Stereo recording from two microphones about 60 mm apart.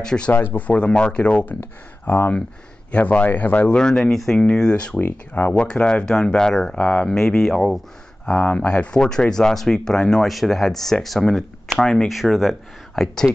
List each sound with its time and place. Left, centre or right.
0.0 s speech: centre
0.3 s speech: left
1.3 s speech: left
3.6 s speech: centre
8.3 s speech: left; by 11.4 s centre
11.8 s speech: centre
12.1 s speech: centre
12.9 s speech: centre